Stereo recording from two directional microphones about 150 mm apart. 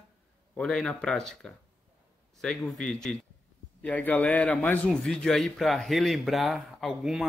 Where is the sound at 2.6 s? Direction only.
5° left (ahead or behind).